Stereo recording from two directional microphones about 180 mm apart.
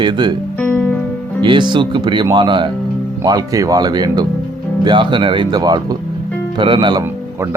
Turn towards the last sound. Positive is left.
turn(degrees=-25)  # may be behind; listen again after turning